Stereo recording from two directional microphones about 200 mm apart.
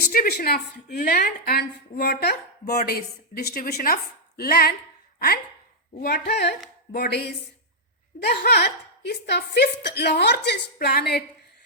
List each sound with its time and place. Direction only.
0.1 s a woman's voice: 50° left (ahead or behind)
6.0 s a woman's voice: 55° left (ahead or behind)